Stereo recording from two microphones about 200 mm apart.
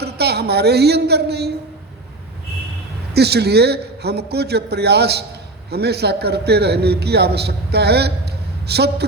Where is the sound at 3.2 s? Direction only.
55° right (ahead or behind).